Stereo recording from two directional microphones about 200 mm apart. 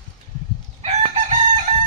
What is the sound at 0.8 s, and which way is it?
Chicken, 35° right (ahead or behind).